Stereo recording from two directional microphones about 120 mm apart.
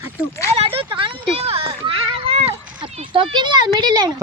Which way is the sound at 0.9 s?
50° right (ahead or behind).